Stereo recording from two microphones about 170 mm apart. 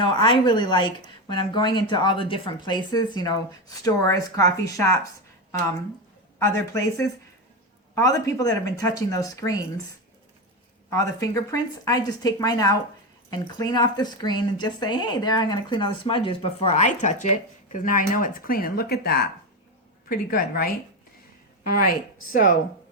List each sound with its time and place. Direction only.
0.0 s a woman's voice: 30° left (ahead or behind)
6.4 s a woman's voice: 15° left (ahead or behind)
10.8 s a woman's voice: 20° left (ahead or behind); by 20.7 s 60° left (ahead or behind)
21.8 s speech: 55° left (ahead or behind)